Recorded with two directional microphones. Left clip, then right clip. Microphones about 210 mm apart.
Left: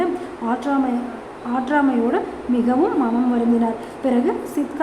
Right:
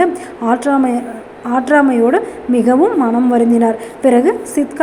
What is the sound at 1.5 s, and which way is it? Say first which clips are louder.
Speech: right 8 dB; 20° right (ahead or behind).